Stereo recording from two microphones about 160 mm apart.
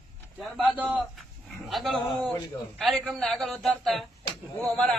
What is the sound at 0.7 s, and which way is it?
A man's voice, 10° right (ahead or behind).